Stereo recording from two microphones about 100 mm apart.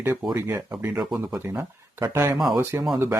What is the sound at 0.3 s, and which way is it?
Speech, 25° right (ahead or behind).